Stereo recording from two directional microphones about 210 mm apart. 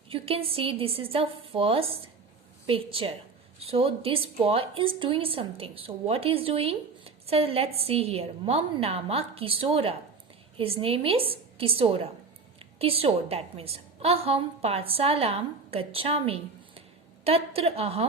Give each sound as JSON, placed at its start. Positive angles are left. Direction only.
{"t": 0.1, "sound": "a woman's voice", "side_deg": -25}